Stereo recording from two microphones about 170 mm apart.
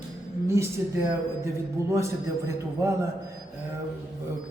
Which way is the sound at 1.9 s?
15° right (ahead or behind).